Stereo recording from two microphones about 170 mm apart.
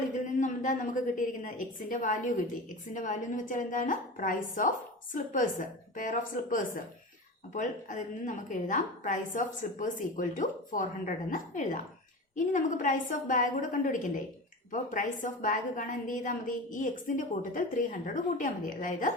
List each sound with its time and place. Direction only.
0.3 s a woman's voice: 50° left (ahead or behind)